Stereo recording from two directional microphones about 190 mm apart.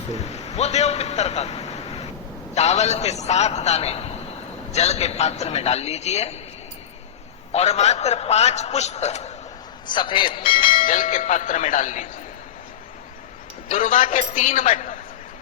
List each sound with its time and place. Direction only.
0.1 s a man's voice: 35° left (ahead or behind)
7.5 s a man's voice: 35° left (ahead or behind)
9.8 s a man's voice: 25° left (ahead or behind)
10.7 s a man's voice: 45° left (ahead or behind)
13.7 s a man's voice: 45° left (ahead or behind)